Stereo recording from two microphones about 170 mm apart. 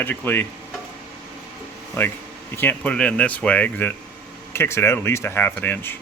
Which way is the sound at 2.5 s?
10° left (ahead or behind).